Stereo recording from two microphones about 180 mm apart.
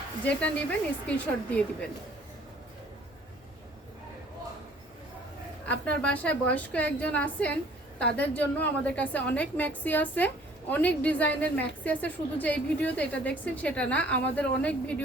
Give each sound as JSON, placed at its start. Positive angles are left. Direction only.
{"t": 0.3, "sound": "a woman's voice", "side_deg": 5}
{"t": 5.6, "sound": "a woman's voice", "side_deg": 5}